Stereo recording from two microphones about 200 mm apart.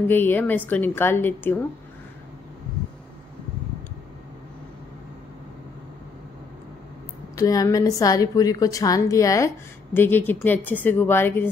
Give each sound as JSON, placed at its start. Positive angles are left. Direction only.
{"t": 0.1, "sound": "a woman's voice", "side_deg": 10}
{"t": 7.3, "sound": "a woman's voice", "side_deg": 15}